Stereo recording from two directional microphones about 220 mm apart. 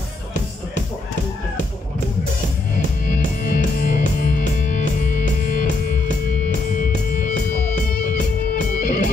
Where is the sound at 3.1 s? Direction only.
40° left (ahead or behind).